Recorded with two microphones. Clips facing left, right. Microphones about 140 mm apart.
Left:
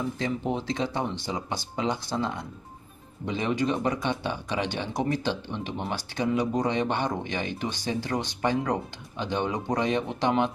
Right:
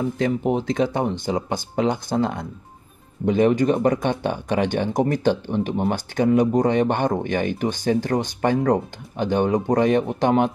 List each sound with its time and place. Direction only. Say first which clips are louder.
0.5 s speech: right 7 dB; 50° right (ahead or behind)